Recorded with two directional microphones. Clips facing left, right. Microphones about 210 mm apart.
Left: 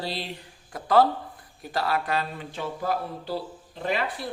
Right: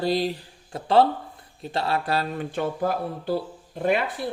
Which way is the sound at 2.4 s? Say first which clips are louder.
Right 6 dB; 55° right (ahead or behind).